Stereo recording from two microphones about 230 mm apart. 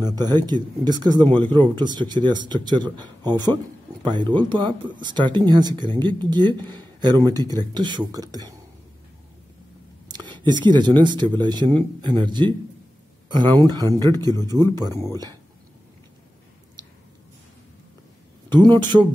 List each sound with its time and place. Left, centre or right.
0.0 s speech: centre
10.0 s speech: centre
18.5 s speech: centre